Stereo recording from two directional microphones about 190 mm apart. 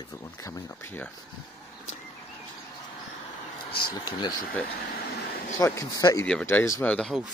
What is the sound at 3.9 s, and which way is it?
Speech, 20° left (ahead or behind).